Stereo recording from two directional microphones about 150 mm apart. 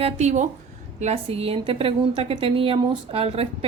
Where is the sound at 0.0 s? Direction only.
50° right (ahead or behind).